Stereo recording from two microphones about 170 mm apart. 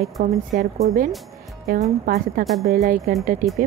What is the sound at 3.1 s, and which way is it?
Speech, 50° right (ahead or behind).